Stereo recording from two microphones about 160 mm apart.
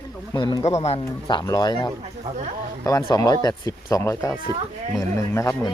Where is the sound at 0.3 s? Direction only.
30° left (ahead or behind).